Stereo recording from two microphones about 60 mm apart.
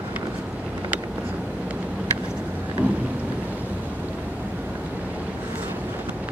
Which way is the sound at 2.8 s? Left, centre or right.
Right.